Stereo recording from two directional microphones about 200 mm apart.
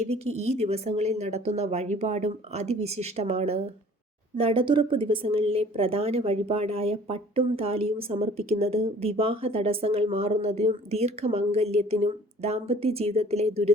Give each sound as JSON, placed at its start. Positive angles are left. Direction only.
{"t": 0.0, "sound": "a woman's voice", "side_deg": -30}